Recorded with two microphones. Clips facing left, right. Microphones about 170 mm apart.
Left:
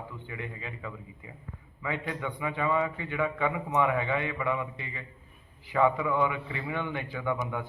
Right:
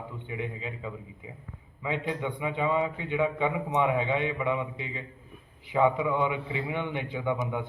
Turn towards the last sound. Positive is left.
turn(degrees=-20)  # may be behind; listen again after turning